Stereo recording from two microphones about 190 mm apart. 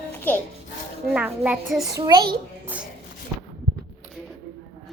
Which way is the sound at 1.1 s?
5° right (ahead or behind).